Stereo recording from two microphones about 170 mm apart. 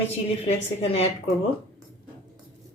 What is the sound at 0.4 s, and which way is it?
Speech, 40° left (ahead or behind).